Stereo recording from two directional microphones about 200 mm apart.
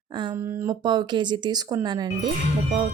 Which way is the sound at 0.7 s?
20° right (ahead or behind).